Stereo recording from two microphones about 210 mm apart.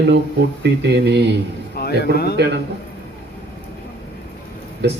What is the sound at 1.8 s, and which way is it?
Speech, 50° left (ahead or behind).